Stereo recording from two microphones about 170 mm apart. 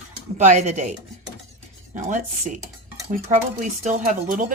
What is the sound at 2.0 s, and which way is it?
A woman's voice, 50° right (ahead or behind).